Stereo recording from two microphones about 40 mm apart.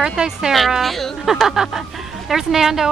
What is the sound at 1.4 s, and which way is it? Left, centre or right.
A woman's voice, centre.